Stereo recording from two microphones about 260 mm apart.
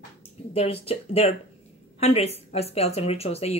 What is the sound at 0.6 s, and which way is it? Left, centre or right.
A woman's voice, left.